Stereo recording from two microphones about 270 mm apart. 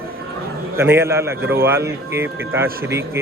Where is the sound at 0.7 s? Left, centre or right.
Centre.